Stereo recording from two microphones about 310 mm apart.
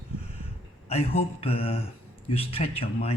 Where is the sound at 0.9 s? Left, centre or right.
Centre.